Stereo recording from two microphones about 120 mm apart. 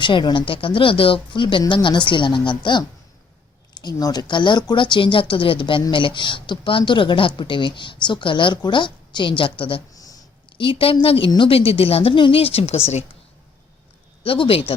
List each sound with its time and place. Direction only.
0.0 s speech: 40° left (ahead or behind)
9.9 s a sound: 30° left (ahead or behind)
10.6 s speech: 50° left (ahead or behind)
14.3 s speech: 50° left (ahead or behind)